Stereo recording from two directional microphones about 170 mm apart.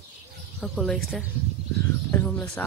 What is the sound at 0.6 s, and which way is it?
Speech, centre (ahead or behind).